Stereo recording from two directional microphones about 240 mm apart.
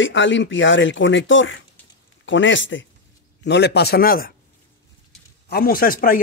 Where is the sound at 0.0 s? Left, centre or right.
Left.